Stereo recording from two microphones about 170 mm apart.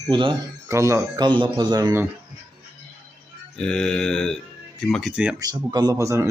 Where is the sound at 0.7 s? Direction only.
15° right (ahead or behind).